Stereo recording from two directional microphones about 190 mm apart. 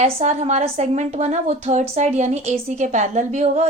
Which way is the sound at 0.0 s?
40° right (ahead or behind).